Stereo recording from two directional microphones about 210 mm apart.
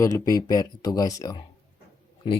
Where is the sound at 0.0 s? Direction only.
15° left (ahead or behind).